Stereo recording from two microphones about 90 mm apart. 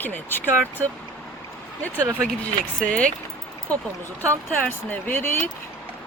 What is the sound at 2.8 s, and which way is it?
Speech, 10° left (ahead or behind).